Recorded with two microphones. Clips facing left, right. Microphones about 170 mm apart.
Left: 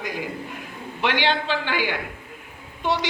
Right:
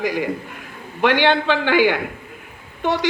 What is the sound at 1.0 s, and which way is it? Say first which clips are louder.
A man's voice: right 6 dB; 50° right (ahead or behind).